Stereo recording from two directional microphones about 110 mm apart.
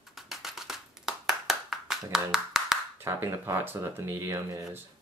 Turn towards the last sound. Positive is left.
turn(degrees=-25)  # may be behind; listen again after turning